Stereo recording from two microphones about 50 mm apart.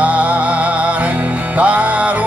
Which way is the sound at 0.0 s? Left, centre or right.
Right.